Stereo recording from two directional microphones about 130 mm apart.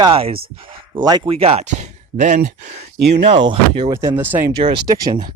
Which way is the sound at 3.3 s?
35° right (ahead or behind).